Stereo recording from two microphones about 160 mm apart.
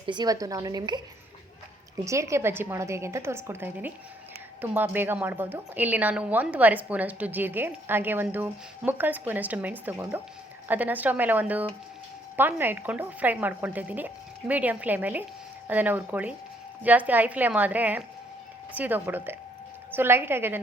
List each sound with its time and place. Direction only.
0.0 s a woman's voice: 30° right (ahead or behind)
2.0 s a woman's voice: 20° right (ahead or behind)